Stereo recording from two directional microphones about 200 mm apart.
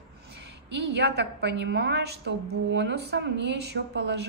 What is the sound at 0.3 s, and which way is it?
A woman's voice, 55° right (ahead or behind).